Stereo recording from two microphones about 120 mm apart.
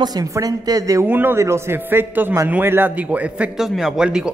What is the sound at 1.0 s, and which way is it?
A man's voice, 15° right (ahead or behind).